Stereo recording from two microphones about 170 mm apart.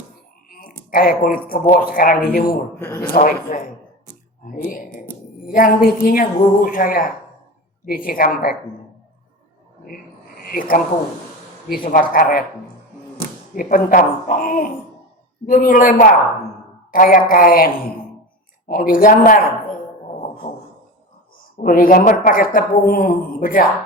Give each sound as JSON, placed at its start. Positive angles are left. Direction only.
{"t": 0.9, "sound": "speech", "side_deg": 55}
{"t": 2.7, "sound": "a man's voice", "side_deg": 15}
{"t": 3.2, "sound": "speech", "side_deg": 50}
{"t": 10.5, "sound": "speech", "side_deg": 55}
{"t": 13.6, "sound": "speech", "side_deg": 55}
{"t": 18.7, "sound": "speech", "side_deg": 55}
{"t": 21.6, "sound": "speech", "side_deg": 55}